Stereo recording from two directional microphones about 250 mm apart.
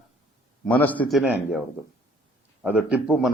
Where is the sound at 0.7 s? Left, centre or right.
Centre.